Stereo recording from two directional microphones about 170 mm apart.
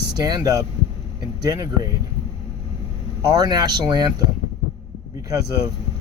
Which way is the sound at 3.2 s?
25° right (ahead or behind).